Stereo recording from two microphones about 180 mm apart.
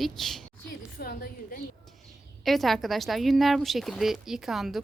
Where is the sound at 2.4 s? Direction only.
Centre (ahead or behind).